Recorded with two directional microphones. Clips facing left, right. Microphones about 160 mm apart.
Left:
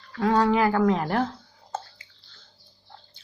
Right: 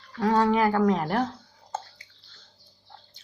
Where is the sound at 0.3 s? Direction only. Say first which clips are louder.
Left 1 dB; 25° right (ahead or behind).